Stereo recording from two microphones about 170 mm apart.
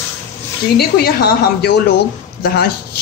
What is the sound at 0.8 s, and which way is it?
Speech, 65° left (ahead or behind).